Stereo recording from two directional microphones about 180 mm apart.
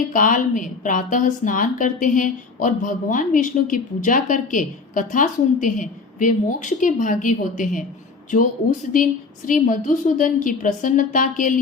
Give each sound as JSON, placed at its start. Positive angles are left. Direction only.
{"t": 0.1, "sound": "a woman's voice", "side_deg": 50}
{"t": 9.5, "sound": "a woman's voice", "side_deg": 45}